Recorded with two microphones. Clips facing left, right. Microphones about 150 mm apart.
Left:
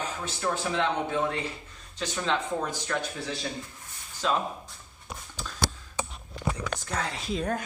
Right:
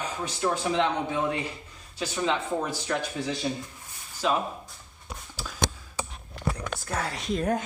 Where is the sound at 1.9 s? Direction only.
10° right (ahead or behind).